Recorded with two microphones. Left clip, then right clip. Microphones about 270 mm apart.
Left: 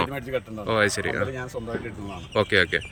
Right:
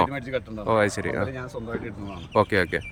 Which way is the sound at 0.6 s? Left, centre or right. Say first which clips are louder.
Even; centre.